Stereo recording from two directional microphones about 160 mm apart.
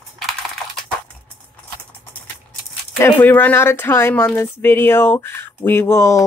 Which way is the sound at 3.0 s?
10° left (ahead or behind).